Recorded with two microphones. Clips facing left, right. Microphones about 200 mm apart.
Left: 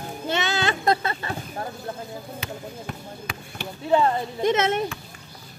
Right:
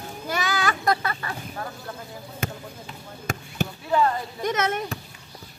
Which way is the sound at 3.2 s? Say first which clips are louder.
Right 10 dB; 45° right (ahead or behind).